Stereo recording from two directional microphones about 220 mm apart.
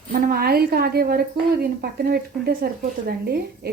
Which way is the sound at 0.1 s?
40° right (ahead or behind).